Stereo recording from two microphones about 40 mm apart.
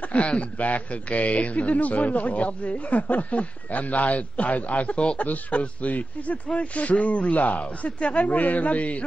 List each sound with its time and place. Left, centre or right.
0.1 s a man's voice: left